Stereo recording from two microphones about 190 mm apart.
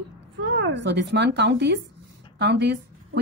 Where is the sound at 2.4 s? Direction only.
65° right (ahead or behind).